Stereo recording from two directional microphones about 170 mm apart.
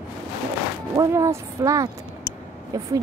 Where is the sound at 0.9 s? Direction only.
20° right (ahead or behind).